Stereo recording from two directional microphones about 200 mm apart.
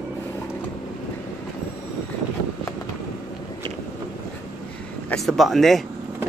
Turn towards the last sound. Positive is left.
turn(degrees=0)  # may be behind; listen again after turning